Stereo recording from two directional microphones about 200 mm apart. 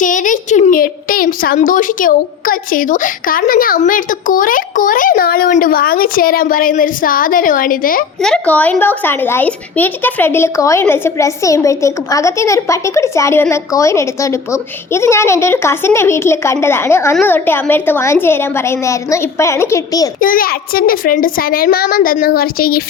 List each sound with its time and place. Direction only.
0.0 s speech: 40° left (ahead or behind)
8.2 s speech: 5° left (ahead or behind)
20.1 s speech: 45° left (ahead or behind)